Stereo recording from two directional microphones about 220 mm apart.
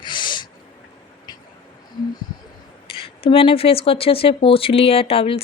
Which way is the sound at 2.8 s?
25° left (ahead or behind).